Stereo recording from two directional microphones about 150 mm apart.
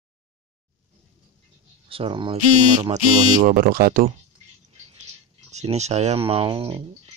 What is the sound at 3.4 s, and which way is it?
Speech, 65° right (ahead or behind).